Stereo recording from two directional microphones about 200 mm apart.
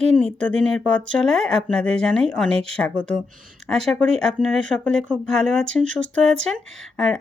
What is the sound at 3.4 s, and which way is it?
Speech, centre (ahead or behind).